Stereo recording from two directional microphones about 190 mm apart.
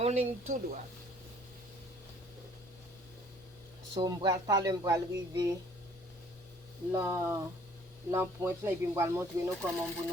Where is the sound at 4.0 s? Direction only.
20° right (ahead or behind).